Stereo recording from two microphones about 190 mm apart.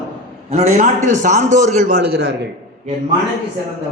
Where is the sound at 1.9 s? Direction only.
60° right (ahead or behind).